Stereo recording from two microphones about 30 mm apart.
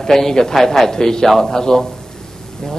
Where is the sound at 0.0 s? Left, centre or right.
Centre.